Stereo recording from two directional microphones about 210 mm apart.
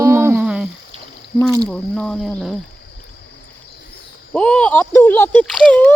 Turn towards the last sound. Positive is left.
turn(degrees=5)  # may be behind; listen again after turning